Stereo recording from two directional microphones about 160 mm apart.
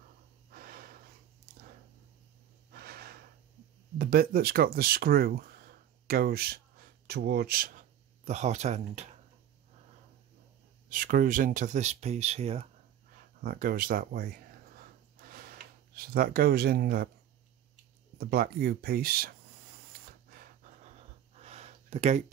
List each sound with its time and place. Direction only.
0.5 s snort: 65° right (ahead or behind)
2.7 s snort: 75° right (ahead or behind)
4.0 s speech: 70° right (ahead or behind)
8.3 s speech: 45° right (ahead or behind)
10.9 s speech: 60° right (ahead or behind); by 12.6 s 40° right (ahead or behind)
13.4 s speech: 65° right (ahead or behind)
14.8 s a sound: 65° right (ahead or behind)
18.1 s speech: 70° right (ahead or behind)
20.1 s a sound: 65° right (ahead or behind); by 22.2 s 45° right (ahead or behind)